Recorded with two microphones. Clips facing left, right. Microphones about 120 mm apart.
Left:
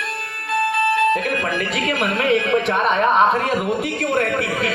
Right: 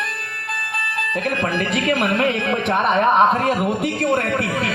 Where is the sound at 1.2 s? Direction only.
45° right (ahead or behind).